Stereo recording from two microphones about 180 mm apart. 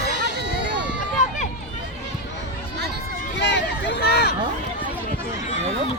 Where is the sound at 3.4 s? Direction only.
75° left (ahead or behind).